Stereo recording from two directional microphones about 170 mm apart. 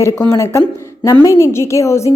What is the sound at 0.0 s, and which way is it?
A woman's voice, 15° left (ahead or behind).